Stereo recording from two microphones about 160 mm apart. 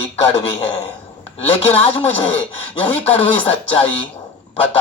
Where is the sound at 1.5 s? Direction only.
40° left (ahead or behind).